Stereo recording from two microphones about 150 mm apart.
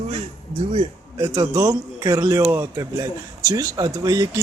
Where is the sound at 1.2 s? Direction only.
25° right (ahead or behind).